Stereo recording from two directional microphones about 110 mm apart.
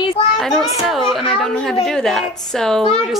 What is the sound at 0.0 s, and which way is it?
Children playing, 60° left (ahead or behind).